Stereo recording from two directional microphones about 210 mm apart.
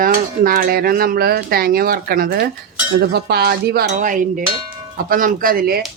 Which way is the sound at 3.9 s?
40° right (ahead or behind).